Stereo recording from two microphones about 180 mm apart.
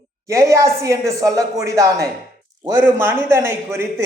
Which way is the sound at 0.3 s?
15° right (ahead or behind).